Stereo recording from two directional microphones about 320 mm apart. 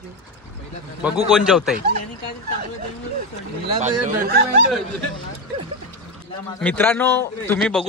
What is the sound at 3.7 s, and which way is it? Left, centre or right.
Speech, right.